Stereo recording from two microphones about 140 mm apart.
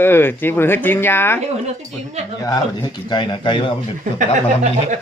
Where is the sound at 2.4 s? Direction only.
30° left (ahead or behind).